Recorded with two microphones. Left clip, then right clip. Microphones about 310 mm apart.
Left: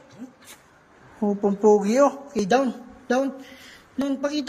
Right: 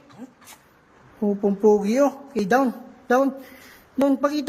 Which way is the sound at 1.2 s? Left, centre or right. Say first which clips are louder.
Right 1 dB; centre.